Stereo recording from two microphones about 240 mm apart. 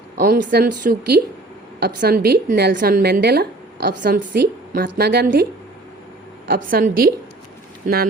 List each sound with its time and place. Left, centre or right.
0.2 s a woman's voice: right
6.5 s a woman's voice: right